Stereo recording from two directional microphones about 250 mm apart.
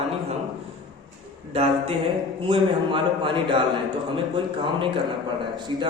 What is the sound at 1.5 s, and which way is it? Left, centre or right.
A man's voice, right.